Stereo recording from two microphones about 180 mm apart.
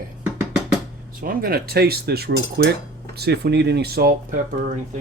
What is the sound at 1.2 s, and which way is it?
Speech, 55° right (ahead or behind).